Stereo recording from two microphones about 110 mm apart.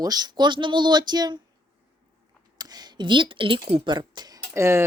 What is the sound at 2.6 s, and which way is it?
Speech, 40° right (ahead or behind).